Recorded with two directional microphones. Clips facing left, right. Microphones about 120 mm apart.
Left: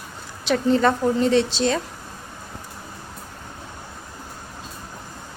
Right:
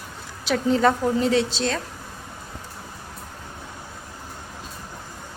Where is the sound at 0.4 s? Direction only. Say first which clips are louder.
Left 1 dB; 5° right (ahead or behind).